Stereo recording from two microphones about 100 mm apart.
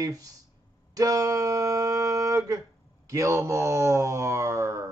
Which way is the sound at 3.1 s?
30° right (ahead or behind).